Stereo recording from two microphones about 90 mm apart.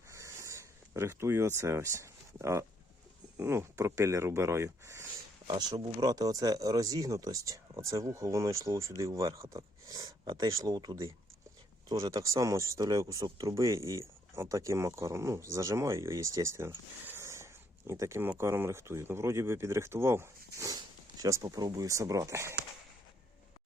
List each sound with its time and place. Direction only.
0.1 s a sound: 35° right (ahead or behind)
3.3 s speech: 30° right (ahead or behind)
5.5 s speech: 50° right (ahead or behind)
11.9 s speech: 45° right (ahead or behind); by 20.7 s 30° right (ahead or behind)
20.7 s speech: 45° right (ahead or behind)